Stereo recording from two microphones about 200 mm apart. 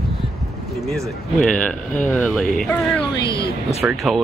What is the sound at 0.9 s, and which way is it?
Speech, 5° left (ahead or behind).